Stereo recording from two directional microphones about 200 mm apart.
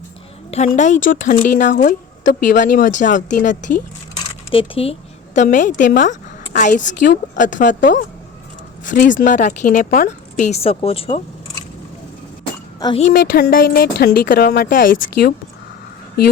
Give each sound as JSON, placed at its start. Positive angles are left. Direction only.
{"t": 0.5, "sound": "speech", "side_deg": 35}
{"t": 4.5, "sound": "a woman's voice", "side_deg": 25}
{"t": 12.8, "sound": "speech", "side_deg": 30}
{"t": 13.1, "sound": "speech", "side_deg": 50}